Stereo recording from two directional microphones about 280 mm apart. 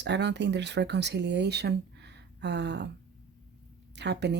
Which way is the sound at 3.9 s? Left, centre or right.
Right.